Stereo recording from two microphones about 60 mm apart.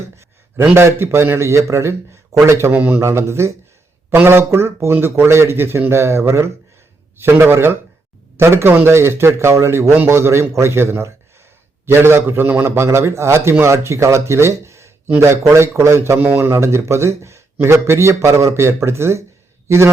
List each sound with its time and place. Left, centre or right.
0.7 s a man's voice: right
2.7 s speech: right
3.0 s a man's voice: right
16.5 s a man's voice: right